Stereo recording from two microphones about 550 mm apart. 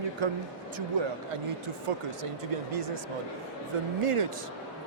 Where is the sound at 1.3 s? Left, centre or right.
Right.